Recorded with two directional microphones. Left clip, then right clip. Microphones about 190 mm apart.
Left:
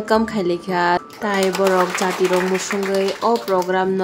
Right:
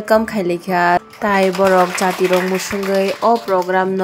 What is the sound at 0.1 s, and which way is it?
Speech, 15° right (ahead or behind).